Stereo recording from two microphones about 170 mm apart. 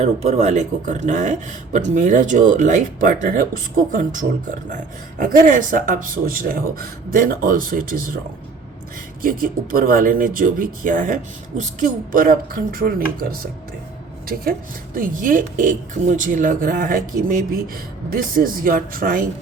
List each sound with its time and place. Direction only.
0.0 s speech: 40° right (ahead or behind); by 8.2 s 55° right (ahead or behind)
9.2 s speech: 55° right (ahead or behind)